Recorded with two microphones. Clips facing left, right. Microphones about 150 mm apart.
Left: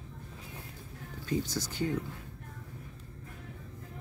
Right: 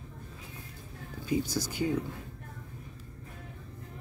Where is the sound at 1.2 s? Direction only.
10° right (ahead or behind).